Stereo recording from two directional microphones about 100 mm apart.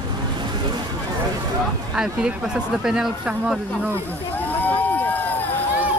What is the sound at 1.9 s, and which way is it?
Speech, 5° right (ahead or behind).